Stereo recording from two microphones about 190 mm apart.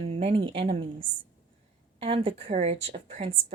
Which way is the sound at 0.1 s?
30° right (ahead or behind).